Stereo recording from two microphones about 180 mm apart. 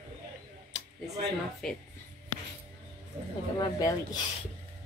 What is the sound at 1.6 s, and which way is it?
Speech, 5° left (ahead or behind).